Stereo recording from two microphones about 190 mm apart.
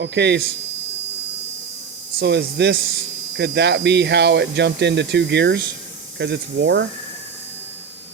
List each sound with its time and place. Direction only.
0.0 s speech: 65° right (ahead or behind)
2.1 s speech: 65° right (ahead or behind)